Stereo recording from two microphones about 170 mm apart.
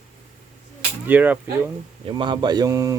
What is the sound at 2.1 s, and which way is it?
Speech, 30° right (ahead or behind).